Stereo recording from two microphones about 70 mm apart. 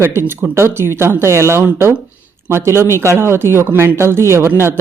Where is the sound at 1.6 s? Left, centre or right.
Right.